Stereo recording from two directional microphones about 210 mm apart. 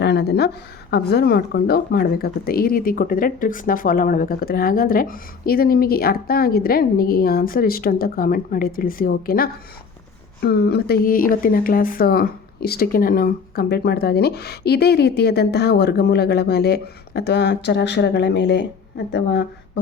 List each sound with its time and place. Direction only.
0.0 s speech: 50° left (ahead or behind)